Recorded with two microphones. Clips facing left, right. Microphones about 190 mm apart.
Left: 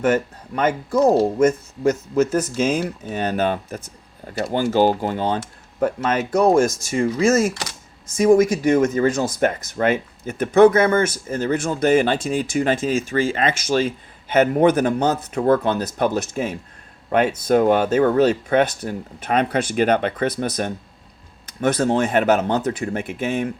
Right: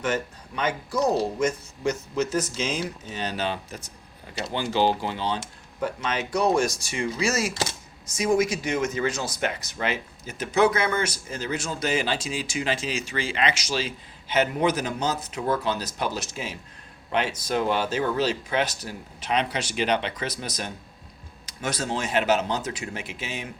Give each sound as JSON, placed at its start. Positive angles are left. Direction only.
{"t": 0.0, "sound": "speech", "side_deg": 50}